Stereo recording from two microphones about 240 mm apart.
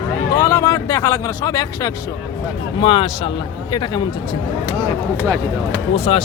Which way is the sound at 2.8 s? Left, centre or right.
Left.